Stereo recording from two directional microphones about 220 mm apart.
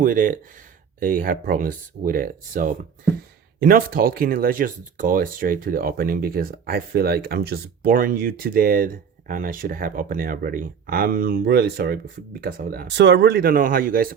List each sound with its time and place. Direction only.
0.0 s speech: 40° right (ahead or behind)